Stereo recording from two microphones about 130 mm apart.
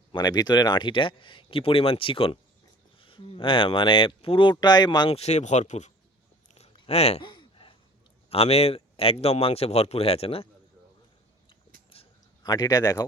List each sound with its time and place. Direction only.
0.1 s speech: 30° left (ahead or behind)
5.1 s speech: 60° left (ahead or behind)
6.7 s speech: 50° left (ahead or behind)
7.3 s a sound: 40° left (ahead or behind)
8.3 s speech: 50° left (ahead or behind)
12.4 s speech: 30° left (ahead or behind)